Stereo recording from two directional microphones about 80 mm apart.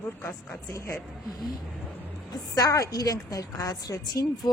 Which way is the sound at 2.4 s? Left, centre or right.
Left.